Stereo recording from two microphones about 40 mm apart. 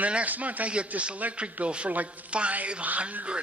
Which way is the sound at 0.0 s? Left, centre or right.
Right.